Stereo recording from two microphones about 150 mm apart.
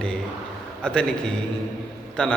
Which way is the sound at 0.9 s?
5° left (ahead or behind).